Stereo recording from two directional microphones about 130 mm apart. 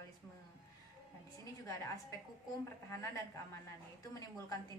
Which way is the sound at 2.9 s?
20° left (ahead or behind).